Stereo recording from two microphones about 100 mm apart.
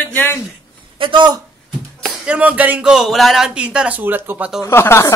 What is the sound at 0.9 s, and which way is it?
Speech, 55° right (ahead or behind).